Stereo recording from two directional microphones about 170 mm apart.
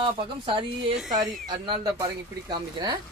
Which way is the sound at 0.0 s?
30° right (ahead or behind).